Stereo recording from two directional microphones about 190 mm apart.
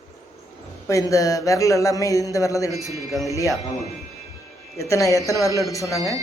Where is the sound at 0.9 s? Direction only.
15° left (ahead or behind).